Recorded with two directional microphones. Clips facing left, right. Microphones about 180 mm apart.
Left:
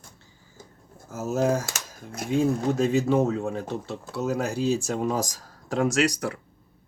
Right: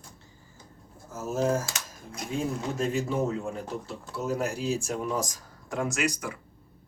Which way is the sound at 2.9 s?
80° left.